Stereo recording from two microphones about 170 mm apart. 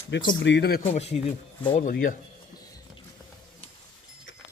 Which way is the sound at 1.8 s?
55° left (ahead or behind).